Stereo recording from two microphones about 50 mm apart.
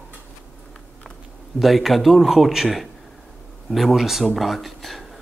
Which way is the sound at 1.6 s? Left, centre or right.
Centre.